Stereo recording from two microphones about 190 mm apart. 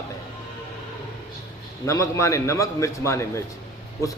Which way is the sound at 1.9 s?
15° left (ahead or behind).